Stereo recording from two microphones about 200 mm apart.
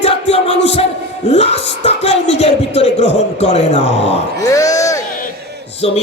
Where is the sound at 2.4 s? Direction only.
30° left (ahead or behind).